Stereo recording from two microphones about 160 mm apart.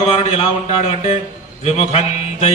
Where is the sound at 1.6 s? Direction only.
45° left (ahead or behind).